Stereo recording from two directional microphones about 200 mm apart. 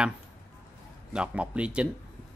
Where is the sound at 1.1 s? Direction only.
5° right (ahead or behind).